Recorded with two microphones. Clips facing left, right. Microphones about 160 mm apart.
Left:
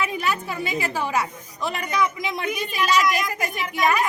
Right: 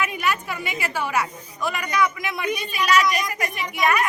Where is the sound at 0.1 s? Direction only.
30° left (ahead or behind).